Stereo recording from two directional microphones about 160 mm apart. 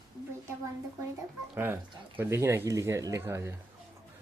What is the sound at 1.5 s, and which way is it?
Speech, 15° right (ahead or behind).